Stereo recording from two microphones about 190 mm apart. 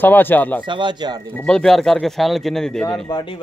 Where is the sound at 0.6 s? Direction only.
25° right (ahead or behind).